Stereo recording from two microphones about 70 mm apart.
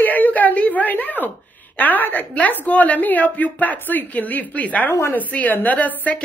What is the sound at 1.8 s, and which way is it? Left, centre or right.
Speech, left.